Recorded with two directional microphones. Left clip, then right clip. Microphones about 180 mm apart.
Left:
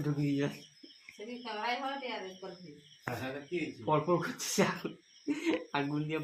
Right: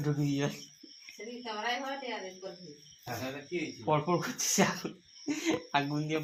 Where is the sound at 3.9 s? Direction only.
40° right (ahead or behind).